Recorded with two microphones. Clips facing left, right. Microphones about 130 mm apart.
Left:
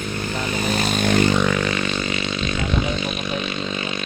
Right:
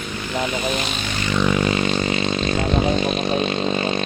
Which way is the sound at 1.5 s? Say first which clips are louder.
Right 3 dB; 25° right (ahead or behind).